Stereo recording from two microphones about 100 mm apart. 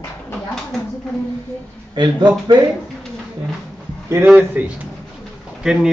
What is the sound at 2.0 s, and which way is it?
Speech, 50° right (ahead or behind).